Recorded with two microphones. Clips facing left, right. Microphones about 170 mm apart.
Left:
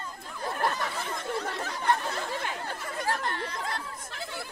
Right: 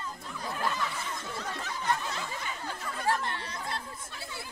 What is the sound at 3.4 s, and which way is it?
Chatter, 60° left (ahead or behind).